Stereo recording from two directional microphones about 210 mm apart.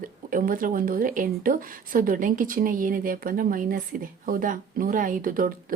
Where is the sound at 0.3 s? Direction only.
40° right (ahead or behind).